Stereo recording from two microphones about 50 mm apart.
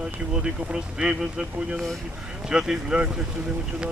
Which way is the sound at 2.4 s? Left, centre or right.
Centre.